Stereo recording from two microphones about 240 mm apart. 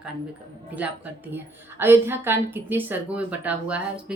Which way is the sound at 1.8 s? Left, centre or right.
Centre.